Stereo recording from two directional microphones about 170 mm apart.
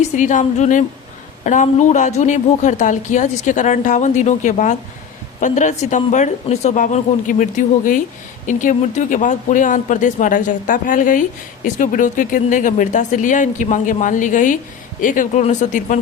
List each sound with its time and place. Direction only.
0.2 s speech: 45° left (ahead or behind)